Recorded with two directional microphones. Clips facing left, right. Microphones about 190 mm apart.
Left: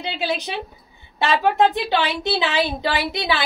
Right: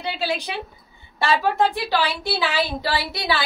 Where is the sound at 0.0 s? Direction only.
20° left (ahead or behind).